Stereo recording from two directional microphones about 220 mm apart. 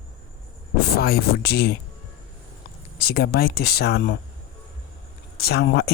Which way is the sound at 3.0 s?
45° left (ahead or behind).